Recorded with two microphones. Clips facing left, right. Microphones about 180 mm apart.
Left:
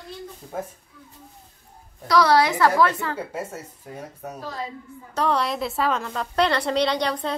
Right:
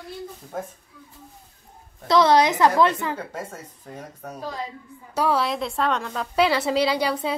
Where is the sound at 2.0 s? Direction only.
25° right (ahead or behind).